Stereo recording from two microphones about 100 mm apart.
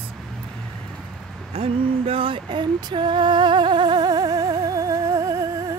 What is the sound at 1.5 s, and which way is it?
Female singing, 75° right (ahead or behind).